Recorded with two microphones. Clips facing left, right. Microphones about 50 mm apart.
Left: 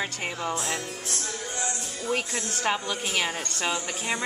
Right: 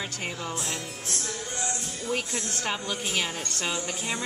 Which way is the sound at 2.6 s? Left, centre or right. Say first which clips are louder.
Left 5 dB; centre.